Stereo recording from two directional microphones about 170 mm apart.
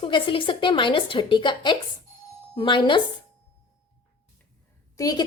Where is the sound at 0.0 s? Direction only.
30° left (ahead or behind).